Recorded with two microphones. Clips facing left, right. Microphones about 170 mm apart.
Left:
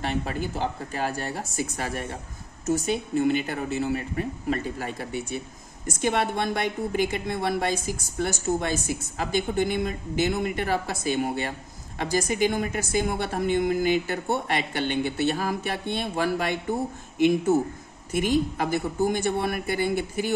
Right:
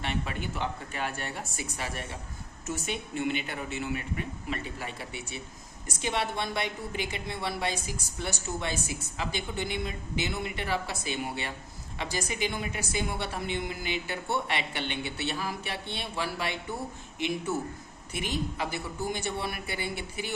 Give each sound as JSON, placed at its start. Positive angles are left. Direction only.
{"t": 0.0, "sound": "a woman's voice", "side_deg": 40}